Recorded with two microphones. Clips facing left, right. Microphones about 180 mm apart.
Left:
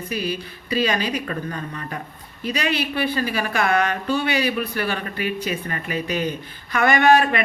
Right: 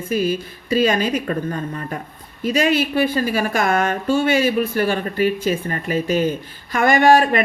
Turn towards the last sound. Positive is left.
turn(degrees=-45)  # may be behind; listen again after turning